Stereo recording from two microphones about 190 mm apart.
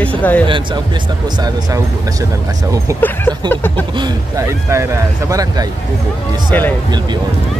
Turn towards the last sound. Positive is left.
turn(degrees=-25)  # may be behind; listen again after turning